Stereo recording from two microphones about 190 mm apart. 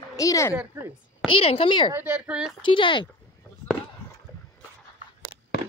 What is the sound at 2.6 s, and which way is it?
Speech, 25° left (ahead or behind).